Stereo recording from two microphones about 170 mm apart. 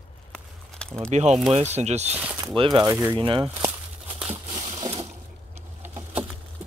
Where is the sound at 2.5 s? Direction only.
30° right (ahead or behind).